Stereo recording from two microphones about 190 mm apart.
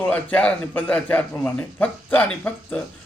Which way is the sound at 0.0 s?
10° left (ahead or behind).